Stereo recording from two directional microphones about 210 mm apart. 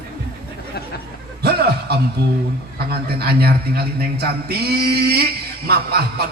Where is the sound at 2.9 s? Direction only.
50° right (ahead or behind).